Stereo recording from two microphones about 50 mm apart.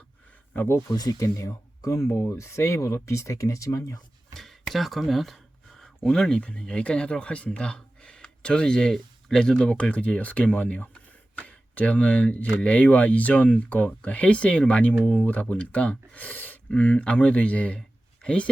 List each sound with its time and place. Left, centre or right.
1.4 s speech: left
4.7 s speech: centre
6.4 s speech: left